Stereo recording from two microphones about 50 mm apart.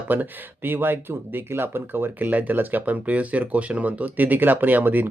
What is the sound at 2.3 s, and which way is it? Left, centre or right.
Speech, right.